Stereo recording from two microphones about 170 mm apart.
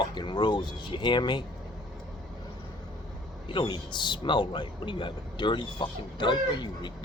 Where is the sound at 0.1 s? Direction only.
25° left (ahead or behind).